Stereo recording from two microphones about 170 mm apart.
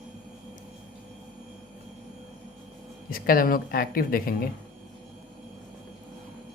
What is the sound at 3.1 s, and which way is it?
Speech, 55° left (ahead or behind).